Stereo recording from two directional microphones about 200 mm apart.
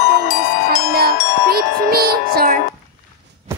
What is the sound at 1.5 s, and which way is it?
Wind chime, 50° right (ahead or behind).